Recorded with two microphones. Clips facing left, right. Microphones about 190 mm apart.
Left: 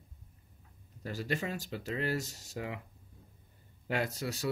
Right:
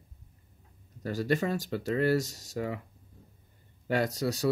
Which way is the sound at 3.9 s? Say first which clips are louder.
Right 6 dB; 40° right (ahead or behind).